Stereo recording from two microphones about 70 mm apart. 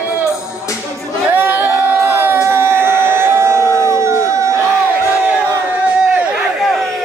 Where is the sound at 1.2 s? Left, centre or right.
Right.